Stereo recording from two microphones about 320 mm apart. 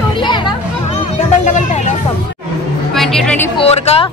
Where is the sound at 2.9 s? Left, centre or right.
Centre.